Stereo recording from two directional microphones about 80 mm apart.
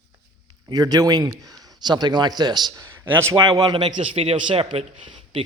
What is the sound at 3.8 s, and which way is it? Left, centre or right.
A man's voice, right.